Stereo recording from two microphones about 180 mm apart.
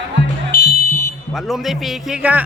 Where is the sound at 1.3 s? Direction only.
Centre (ahead or behind).